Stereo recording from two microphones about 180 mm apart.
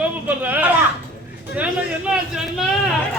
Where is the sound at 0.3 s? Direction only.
10° right (ahead or behind).